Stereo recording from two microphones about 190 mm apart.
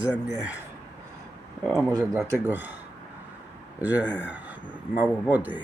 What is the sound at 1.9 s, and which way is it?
Speech, 10° right (ahead or behind).